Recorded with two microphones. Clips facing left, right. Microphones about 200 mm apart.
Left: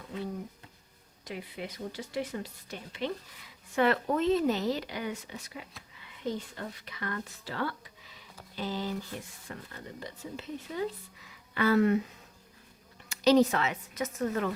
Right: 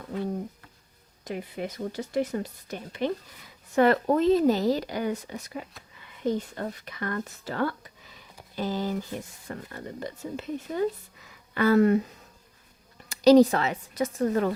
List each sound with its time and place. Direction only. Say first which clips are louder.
1.2 s speech: right 6 dB; 45° right (ahead or behind)
13.1 s speech: right 6 dB; 35° right (ahead or behind)